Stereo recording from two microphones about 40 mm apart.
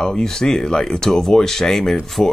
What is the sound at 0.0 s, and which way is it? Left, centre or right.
Speech, centre.